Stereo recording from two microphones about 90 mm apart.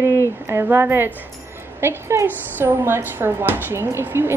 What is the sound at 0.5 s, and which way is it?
A woman's voice, 25° right (ahead or behind).